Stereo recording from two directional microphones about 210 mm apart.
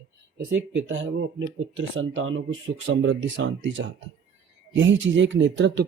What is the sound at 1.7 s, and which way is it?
Speech, 65° right (ahead or behind).